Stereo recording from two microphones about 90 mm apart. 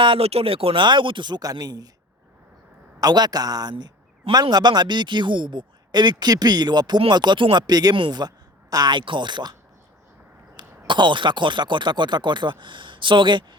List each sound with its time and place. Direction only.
0.0 s speech: 80° right; by 1.4 s 65° right (ahead or behind)
1.4 s a man's voice: 45° right (ahead or behind)
3.0 s a man's voice: 50° right (ahead or behind)
7.9 s speech: 70° right (ahead or behind)
8.7 s speech: 55° right (ahead or behind)
10.6 s speech: 60° right (ahead or behind)